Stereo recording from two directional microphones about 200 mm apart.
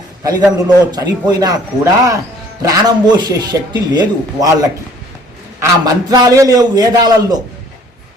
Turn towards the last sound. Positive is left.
turn(degrees=-20)  # may be behind; listen again after turning